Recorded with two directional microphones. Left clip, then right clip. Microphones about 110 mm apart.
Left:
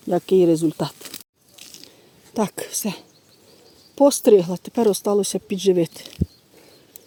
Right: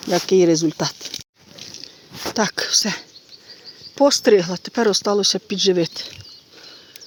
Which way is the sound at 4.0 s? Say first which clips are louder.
Even; 15° right (ahead or behind).